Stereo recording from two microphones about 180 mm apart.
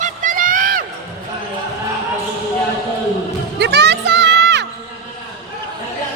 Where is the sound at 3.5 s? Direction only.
70° right (ahead or behind).